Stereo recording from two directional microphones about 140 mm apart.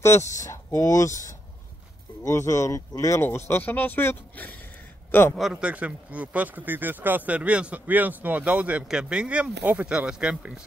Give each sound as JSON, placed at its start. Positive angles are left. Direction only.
{"t": 0.5, "sound": "speech", "side_deg": 20}
{"t": 5.3, "sound": "speech", "side_deg": -5}